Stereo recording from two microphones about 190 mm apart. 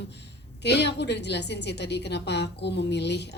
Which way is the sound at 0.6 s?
65° left (ahead or behind).